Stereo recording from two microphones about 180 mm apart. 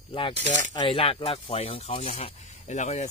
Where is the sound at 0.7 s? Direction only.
30° left (ahead or behind).